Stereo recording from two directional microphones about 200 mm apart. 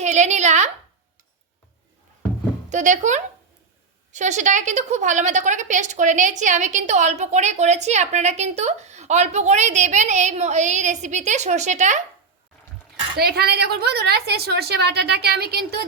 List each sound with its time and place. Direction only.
0.0 s a sound: 35° right (ahead or behind)
2.6 s a woman's voice: 40° right (ahead or behind)
13.1 s a woman's voice: 50° right (ahead or behind)